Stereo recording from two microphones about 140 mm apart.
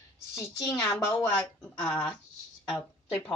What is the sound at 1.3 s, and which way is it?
A woman's voice, 5° left (ahead or behind).